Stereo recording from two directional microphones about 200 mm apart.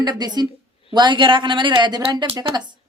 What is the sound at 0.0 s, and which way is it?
A woman's voice, 20° right (ahead or behind).